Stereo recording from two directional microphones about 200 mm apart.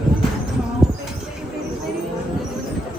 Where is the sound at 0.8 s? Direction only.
Centre (ahead or behind).